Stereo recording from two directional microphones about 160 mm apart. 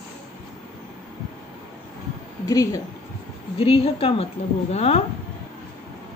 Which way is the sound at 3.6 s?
35° left (ahead or behind).